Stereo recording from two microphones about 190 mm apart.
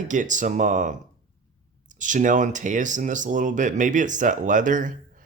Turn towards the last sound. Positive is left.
turn(degrees=-45)  # may be behind; listen again after turning